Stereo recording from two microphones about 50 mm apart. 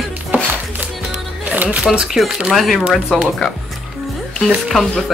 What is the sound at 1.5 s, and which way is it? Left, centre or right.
Speech, right.